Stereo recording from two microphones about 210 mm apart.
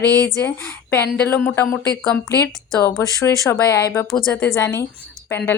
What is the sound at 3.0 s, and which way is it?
A woman's voice, 15° left (ahead or behind).